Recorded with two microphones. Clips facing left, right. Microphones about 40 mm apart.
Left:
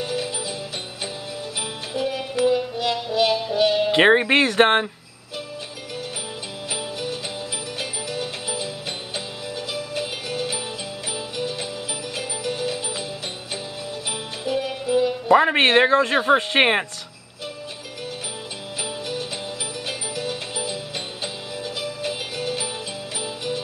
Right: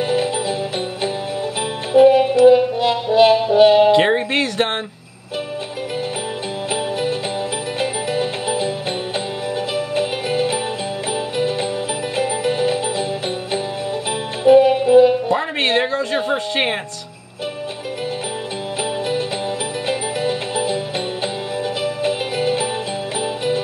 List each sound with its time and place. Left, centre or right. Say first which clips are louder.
0.0 s music: right 8 dB; right
2.0 s music: right 13 dB; right
3.9 s speech: even; left
6.7 s music: right 8 dB; right
9.8 s music: right 8 dB; right
12.2 s music: right 9 dB; right
14.4 s music: right 15 dB; right
15.3 s speech: left 3 dB; left
19.9 s music: right 9 dB; right
21.8 s music: right 8 dB; right